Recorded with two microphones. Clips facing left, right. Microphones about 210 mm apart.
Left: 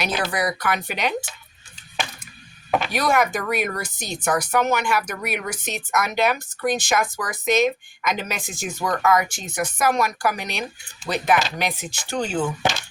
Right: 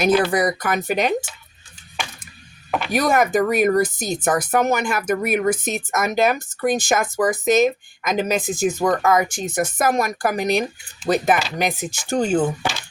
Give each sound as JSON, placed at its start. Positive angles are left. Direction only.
{"t": 0.0, "sound": "speech", "side_deg": -50}
{"t": 2.9, "sound": "speech", "side_deg": -45}